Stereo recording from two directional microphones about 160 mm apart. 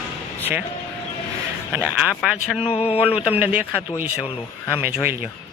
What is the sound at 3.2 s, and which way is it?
Speech, 10° right (ahead or behind).